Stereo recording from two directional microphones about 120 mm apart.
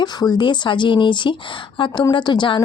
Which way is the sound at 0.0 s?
35° left (ahead or behind).